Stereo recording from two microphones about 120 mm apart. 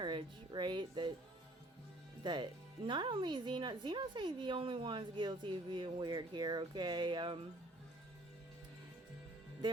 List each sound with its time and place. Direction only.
0.0 s music: 40° right (ahead or behind)
2.2 s speech: 40° right (ahead or behind)